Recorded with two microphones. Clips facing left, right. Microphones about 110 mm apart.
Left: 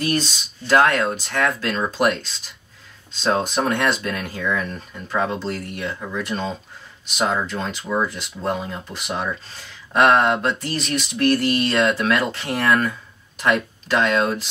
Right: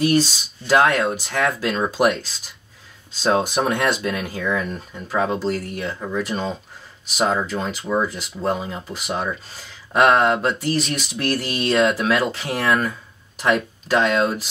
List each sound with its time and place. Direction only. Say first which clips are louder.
0.0 s speech: right 5 dB; 5° right (ahead or behind)
3.2 s speech: right 1 dB; 5° right (ahead or behind)